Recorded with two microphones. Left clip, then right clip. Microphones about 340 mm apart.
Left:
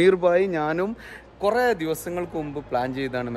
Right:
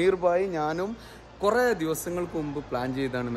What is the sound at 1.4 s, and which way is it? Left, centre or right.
A man's voice, centre.